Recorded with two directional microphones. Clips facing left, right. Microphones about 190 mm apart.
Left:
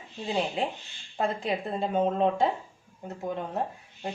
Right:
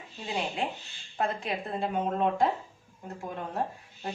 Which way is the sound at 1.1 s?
30° left (ahead or behind).